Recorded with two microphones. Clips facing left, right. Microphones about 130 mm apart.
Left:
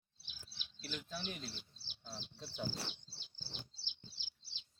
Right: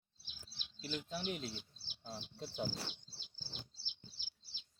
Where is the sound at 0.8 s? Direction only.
20° right (ahead or behind).